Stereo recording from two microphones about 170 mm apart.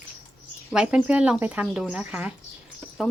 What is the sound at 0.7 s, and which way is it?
Speech, 5° right (ahead or behind).